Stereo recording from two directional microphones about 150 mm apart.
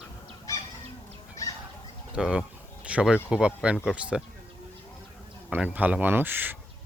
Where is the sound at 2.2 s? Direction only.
5° right (ahead or behind).